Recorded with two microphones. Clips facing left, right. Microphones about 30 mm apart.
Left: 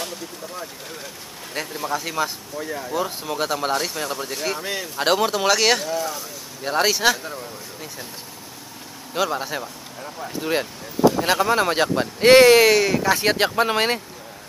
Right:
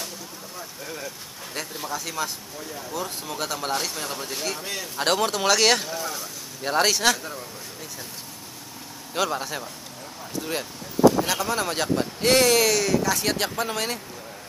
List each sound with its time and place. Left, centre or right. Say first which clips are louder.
1.5 s speech: left 5 dB; centre
2.6 s speech: left 8 dB; left
2.9 s speech: left 5 dB; centre
9.1 s speech: left 3 dB; centre
10.2 s speech: left 6 dB; left